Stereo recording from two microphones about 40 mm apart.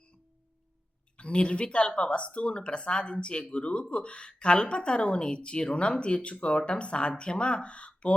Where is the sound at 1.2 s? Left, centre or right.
Left.